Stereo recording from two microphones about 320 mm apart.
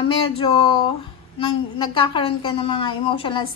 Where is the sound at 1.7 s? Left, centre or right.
Centre.